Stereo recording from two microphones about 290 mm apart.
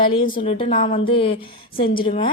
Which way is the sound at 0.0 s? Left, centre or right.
Centre.